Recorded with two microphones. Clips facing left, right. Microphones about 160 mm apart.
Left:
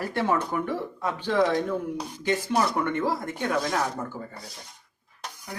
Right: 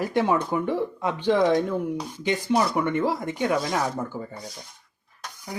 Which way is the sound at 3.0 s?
15° right (ahead or behind).